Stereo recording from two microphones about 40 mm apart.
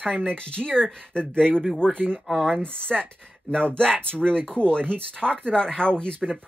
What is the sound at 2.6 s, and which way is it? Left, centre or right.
Speech, left.